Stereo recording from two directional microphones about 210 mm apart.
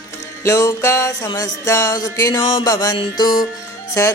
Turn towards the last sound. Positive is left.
turn(degrees=15)  # may be behind; listen again after turning